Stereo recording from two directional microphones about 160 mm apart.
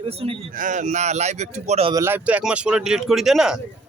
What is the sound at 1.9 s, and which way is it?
Speech, 15° right (ahead or behind).